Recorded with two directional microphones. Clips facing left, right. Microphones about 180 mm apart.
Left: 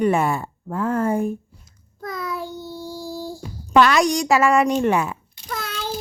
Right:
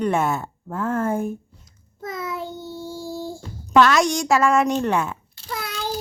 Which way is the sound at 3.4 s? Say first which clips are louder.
Even; 10° left (ahead or behind).